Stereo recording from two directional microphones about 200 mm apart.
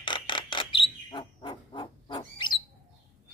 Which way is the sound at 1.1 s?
25° left (ahead or behind).